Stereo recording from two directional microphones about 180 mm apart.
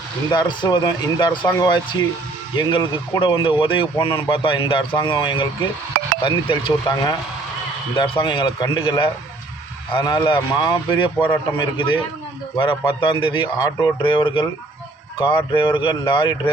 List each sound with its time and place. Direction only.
0.3 s speech: 25° left (ahead or behind)